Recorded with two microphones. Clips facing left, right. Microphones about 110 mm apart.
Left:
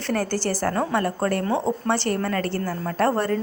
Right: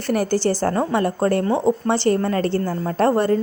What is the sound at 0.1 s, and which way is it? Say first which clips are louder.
A woman's voice: right 5 dB; 15° right (ahead or behind).